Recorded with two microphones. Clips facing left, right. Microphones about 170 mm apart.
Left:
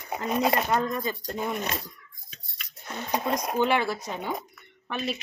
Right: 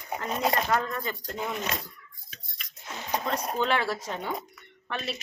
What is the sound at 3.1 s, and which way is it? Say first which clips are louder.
Speech: left 3 dB; 10° left (ahead or behind).